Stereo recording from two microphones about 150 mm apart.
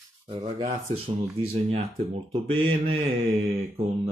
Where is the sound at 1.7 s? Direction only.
40° right (ahead or behind).